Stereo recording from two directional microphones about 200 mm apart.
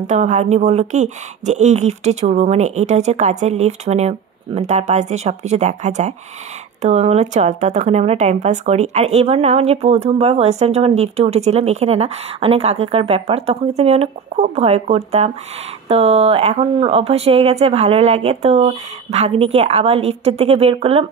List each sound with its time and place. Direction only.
0.0 s speech: 35° right (ahead or behind)